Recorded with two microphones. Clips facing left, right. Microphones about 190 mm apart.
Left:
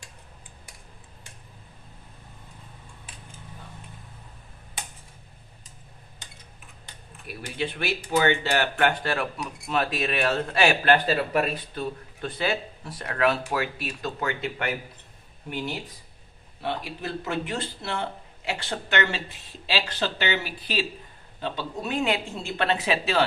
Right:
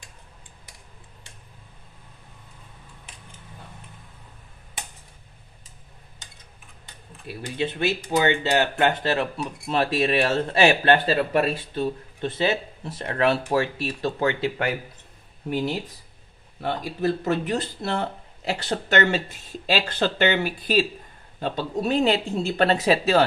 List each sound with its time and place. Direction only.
7.2 s speech: 25° right (ahead or behind)
16.8 s a man's voice: 40° right (ahead or behind)